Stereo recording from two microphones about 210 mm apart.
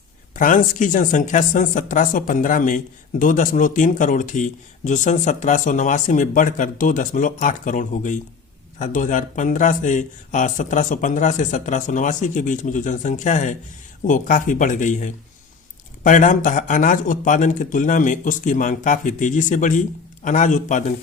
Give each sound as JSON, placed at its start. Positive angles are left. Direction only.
{"t": 0.3, "sound": "speech", "side_deg": 40}